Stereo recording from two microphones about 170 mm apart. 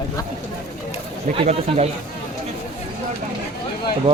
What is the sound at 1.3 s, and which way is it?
Speech, 35° right (ahead or behind).